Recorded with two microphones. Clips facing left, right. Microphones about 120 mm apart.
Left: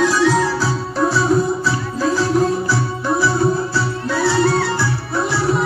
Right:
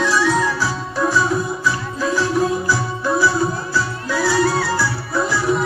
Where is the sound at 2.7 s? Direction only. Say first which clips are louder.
Even; 25° left (ahead or behind).